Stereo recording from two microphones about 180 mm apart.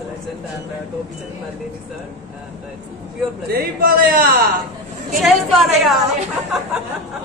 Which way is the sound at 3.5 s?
55° right (ahead or behind).